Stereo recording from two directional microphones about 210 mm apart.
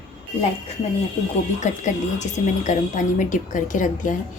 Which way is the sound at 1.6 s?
35° left (ahead or behind).